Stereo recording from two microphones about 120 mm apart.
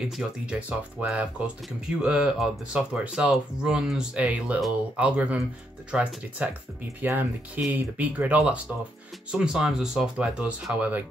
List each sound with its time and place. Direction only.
0.0 s speech: 5° right (ahead or behind)
4.6 s speech: centre (ahead or behind)
5.0 s speech: 10° right (ahead or behind)